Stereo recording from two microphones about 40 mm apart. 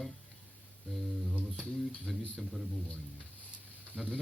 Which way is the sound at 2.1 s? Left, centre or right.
Centre.